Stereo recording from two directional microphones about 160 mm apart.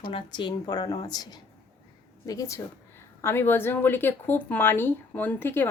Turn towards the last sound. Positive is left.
turn(degrees=15)  # may be behind; listen again after turning